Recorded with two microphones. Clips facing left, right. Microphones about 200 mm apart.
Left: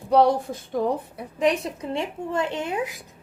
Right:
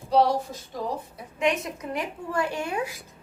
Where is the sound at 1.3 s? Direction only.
35° left (ahead or behind).